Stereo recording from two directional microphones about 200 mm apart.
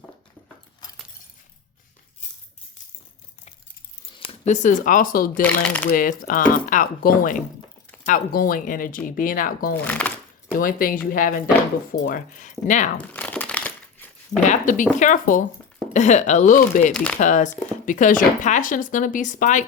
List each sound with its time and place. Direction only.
0.8 s keys jangling: 20° left (ahead or behind)
4.2 s speech: 30° left (ahead or behind)
5.4 s speech: 5° left (ahead or behind)
5.9 s speech: 45° left (ahead or behind)
9.8 s speech: 5° left (ahead or behind)
10.5 s speech: 45° left (ahead or behind)
13.0 s a sound: 5° left (ahead or behind)
14.4 s speech: 40° left (ahead or behind)
16.9 s speech: 5° left (ahead or behind)
17.2 s speech: 40° left (ahead or behind)